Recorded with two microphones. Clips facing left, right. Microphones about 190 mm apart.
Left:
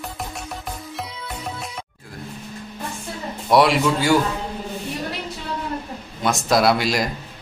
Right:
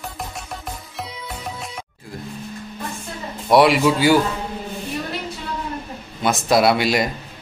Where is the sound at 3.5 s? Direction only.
Centre (ahead or behind).